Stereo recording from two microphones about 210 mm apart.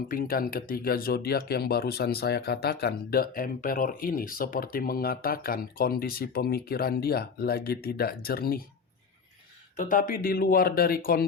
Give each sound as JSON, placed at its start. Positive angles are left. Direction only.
{"t": 0.1, "sound": "speech", "side_deg": 45}
{"t": 9.7, "sound": "speech", "side_deg": 40}